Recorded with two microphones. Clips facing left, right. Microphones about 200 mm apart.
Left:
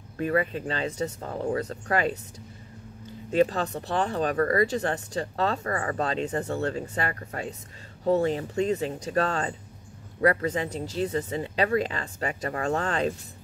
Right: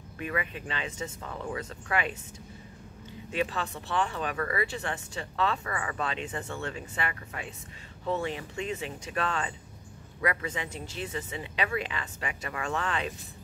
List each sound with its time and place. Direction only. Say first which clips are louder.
0.2 s speech: left 8 dB; 40° left (ahead or behind)
3.3 s speech: left 8 dB; 40° left (ahead or behind)